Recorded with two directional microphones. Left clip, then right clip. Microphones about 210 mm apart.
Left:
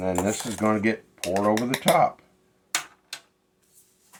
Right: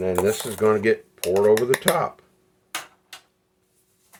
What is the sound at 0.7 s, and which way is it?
Speech, 55° right (ahead or behind).